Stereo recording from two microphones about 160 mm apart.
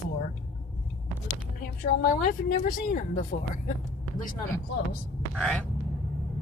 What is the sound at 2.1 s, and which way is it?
Speech, 60° left (ahead or behind).